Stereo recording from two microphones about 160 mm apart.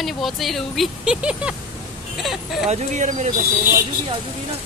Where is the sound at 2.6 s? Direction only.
45° right (ahead or behind).